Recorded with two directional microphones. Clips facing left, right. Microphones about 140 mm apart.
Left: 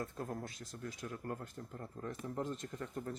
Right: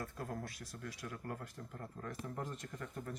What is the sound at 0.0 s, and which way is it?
Speech, 25° left (ahead or behind).